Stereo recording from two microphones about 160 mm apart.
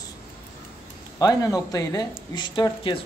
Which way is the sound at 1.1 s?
20° left (ahead or behind).